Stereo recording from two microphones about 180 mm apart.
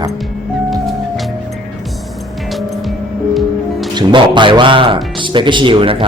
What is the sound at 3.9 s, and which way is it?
A man's voice, 25° right (ahead or behind).